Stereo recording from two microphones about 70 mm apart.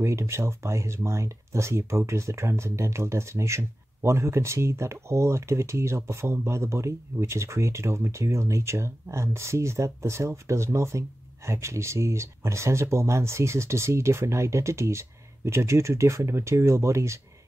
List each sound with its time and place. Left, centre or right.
0.0 s speech: right